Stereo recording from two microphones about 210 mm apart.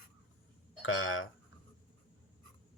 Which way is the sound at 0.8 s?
75° left (ahead or behind).